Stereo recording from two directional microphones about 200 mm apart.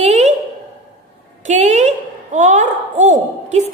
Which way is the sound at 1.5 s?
35° right (ahead or behind).